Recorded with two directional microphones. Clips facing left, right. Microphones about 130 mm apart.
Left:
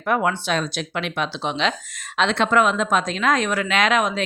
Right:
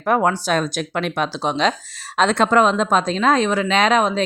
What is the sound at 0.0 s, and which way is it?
Speech, 35° right (ahead or behind).